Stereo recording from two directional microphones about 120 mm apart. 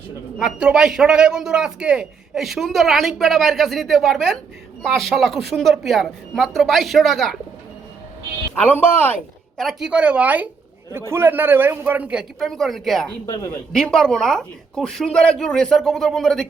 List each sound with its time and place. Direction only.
0.3 s a man's voice: 5° right (ahead or behind)
8.6 s speech: 15° left (ahead or behind)
9.6 s a man's voice: 5° right (ahead or behind)
12.4 s a man's voice: centre (ahead or behind)